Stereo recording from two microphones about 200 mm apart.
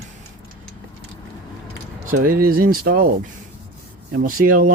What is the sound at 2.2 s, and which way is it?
Speech, 45° right (ahead or behind).